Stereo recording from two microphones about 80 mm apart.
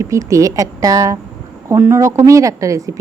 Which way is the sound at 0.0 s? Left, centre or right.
Right.